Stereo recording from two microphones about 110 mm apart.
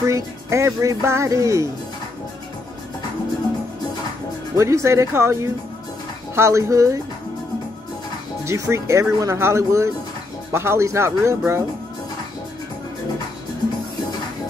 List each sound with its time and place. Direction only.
0.0 s speech: 25° right (ahead or behind)
4.6 s speech: 25° right (ahead or behind)
8.5 s speech: 25° right (ahead or behind)